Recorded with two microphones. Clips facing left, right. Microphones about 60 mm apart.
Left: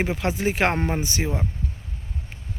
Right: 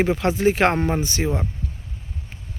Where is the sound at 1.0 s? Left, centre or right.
Centre.